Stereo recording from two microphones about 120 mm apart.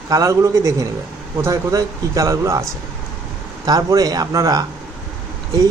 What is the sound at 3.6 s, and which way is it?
Speech, 30° right (ahead or behind).